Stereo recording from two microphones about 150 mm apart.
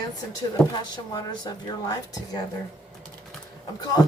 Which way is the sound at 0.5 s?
25° left (ahead or behind).